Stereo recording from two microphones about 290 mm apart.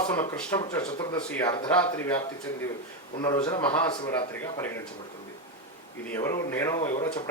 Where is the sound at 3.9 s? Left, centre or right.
Centre.